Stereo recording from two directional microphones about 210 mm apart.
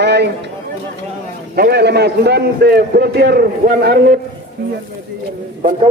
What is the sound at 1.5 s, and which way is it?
A man's voice, 50° right (ahead or behind).